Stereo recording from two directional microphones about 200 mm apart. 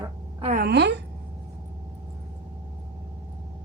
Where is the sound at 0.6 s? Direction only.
55° right (ahead or behind).